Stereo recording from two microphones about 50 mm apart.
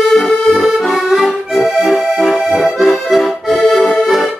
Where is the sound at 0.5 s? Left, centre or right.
Centre.